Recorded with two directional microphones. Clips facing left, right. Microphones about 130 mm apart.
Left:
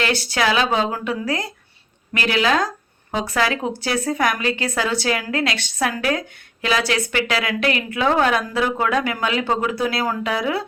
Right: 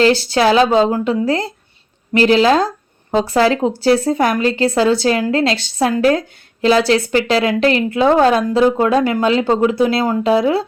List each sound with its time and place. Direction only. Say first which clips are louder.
0.0 s a woman's voice: right 8 dB; 30° right (ahead or behind)